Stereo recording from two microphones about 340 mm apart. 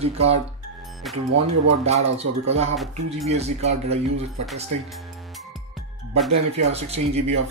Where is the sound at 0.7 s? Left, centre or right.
Centre.